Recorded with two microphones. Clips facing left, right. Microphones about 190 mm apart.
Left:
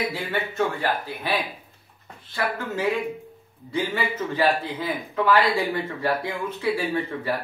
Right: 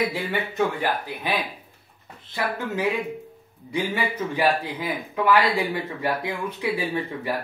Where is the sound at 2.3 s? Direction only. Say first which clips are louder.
Even; 15° right (ahead or behind).